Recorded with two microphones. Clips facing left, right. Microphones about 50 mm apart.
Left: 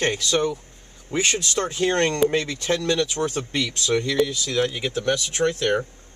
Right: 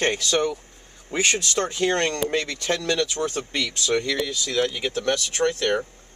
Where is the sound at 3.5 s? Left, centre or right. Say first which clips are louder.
Left 2 dB; centre.